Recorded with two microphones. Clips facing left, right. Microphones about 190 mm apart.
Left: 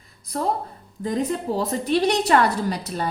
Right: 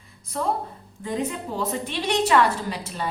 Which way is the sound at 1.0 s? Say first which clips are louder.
Left 4 dB; 35° left (ahead or behind).